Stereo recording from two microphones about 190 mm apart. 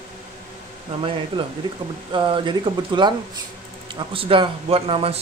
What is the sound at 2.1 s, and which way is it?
Speech, 25° right (ahead or behind).